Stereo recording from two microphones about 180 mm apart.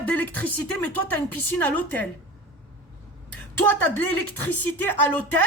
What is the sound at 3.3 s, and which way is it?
A woman's voice, 10° left (ahead or behind).